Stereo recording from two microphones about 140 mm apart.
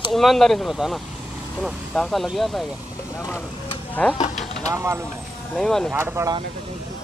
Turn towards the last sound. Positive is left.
turn(degrees=-20)  # may be behind; listen again after turning